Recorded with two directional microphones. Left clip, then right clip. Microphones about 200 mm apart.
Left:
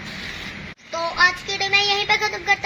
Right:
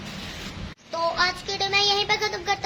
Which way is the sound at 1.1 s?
15° right (ahead or behind).